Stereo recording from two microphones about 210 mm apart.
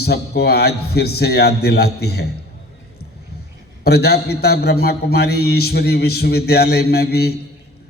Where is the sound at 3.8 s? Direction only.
50° left (ahead or behind).